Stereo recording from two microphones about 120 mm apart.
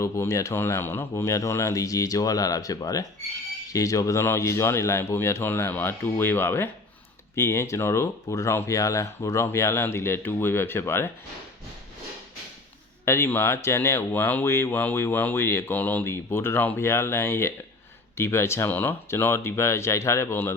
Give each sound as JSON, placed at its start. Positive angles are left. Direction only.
{"t": 0.0, "sound": "speech", "side_deg": 25}
{"t": 13.1, "sound": "speech", "side_deg": 20}